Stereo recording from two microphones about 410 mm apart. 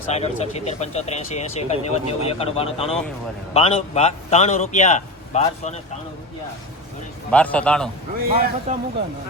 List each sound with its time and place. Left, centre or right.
0.1 s speech: centre
7.3 s a man's voice: centre
8.3 s speech: right